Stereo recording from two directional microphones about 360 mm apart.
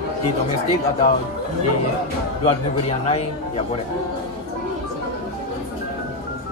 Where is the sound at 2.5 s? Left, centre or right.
Centre.